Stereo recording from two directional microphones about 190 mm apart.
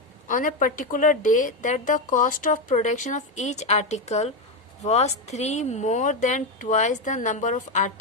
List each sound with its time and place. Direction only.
0.3 s a woman's voice: 45° left (ahead or behind)